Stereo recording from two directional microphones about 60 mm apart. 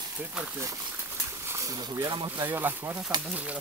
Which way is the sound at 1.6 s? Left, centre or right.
Right.